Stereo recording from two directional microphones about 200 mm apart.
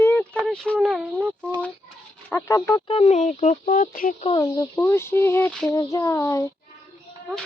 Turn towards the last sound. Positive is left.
turn(degrees=15)  # may be behind; listen again after turning